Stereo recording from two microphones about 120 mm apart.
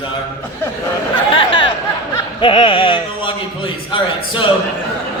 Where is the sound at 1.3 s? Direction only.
45° left (ahead or behind).